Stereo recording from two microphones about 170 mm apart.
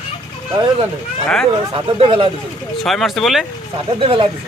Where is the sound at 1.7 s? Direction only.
30° right (ahead or behind).